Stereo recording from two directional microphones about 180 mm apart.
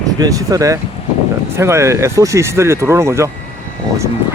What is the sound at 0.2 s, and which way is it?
Speech, 20° right (ahead or behind).